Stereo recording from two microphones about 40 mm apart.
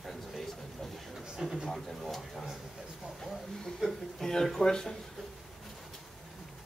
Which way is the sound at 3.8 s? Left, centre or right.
Centre.